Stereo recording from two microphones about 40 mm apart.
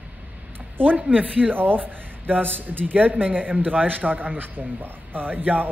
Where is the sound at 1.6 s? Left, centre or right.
Right.